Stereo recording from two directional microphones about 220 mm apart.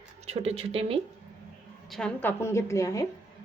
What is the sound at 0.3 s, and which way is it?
Speech, 25° right (ahead or behind).